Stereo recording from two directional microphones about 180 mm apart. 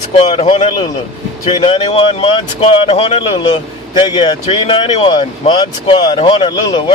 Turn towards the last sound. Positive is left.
turn(degrees=25)  # may be behind; listen again after turning